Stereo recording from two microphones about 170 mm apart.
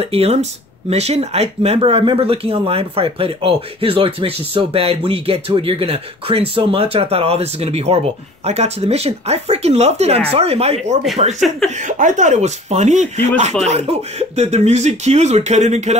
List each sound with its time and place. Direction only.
0.0 s speech: 35° right (ahead or behind)